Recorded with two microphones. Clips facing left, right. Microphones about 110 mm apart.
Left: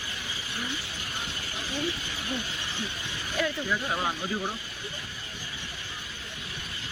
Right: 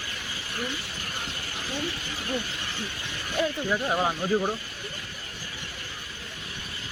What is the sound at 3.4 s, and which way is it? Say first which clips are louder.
Speech: right 3 dB; 20° right (ahead or behind).